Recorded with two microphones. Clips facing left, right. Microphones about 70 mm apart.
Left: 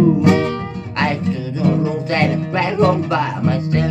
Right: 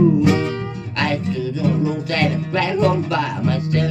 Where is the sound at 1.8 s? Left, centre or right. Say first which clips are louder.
Left 2 dB; left.